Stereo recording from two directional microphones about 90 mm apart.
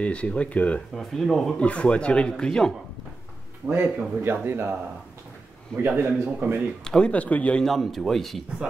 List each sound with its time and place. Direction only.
0.0 s speech: 15° left (ahead or behind)
0.9 s a man's voice: centre (ahead or behind)
3.6 s speech: 25° right (ahead or behind)
5.8 s speech: 25° right (ahead or behind)
6.8 s speech: 10° left (ahead or behind)
7.6 s a man's voice: centre (ahead or behind)